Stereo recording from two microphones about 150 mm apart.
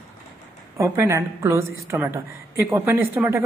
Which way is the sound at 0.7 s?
20° right (ahead or behind).